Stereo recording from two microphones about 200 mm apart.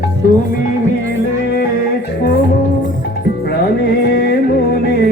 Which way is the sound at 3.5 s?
55° left (ahead or behind).